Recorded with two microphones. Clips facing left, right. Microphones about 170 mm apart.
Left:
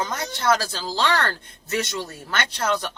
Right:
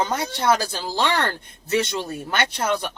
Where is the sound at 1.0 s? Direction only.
15° right (ahead or behind).